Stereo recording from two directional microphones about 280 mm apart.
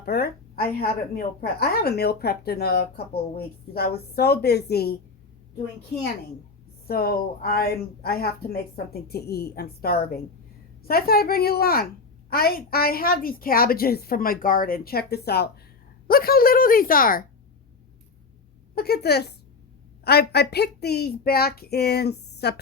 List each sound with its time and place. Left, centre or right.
0.0 s a woman's voice: left
6.8 s a woman's voice: left
18.7 s a woman's voice: left